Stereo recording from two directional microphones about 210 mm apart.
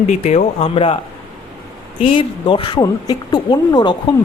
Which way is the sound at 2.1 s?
25° left (ahead or behind).